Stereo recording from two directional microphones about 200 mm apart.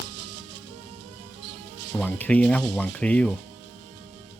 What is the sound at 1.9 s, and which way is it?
Speech, 5° left (ahead or behind).